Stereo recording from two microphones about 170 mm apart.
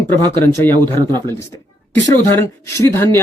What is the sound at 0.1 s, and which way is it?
Speech, 15° left (ahead or behind).